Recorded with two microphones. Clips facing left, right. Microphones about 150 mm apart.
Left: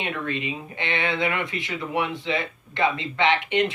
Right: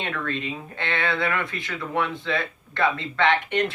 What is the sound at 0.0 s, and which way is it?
Speech, 15° left (ahead or behind).